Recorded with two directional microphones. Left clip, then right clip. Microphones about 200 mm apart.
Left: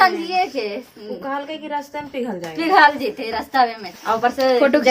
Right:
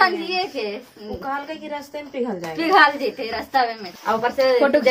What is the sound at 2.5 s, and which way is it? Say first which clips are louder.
A woman's voice: left 2 dB; 25° left (ahead or behind).